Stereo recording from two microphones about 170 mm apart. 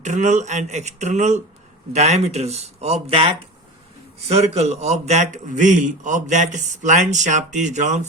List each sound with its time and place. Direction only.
0.0 s a man's voice: 45° right (ahead or behind)
4.3 s a man's voice: 40° right (ahead or behind)